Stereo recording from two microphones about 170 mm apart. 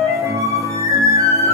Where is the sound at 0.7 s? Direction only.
20° right (ahead or behind).